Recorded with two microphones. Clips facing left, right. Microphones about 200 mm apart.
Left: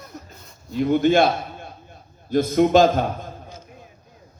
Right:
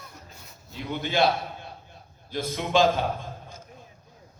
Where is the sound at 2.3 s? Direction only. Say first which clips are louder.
Left 9 dB; 45° left (ahead or behind).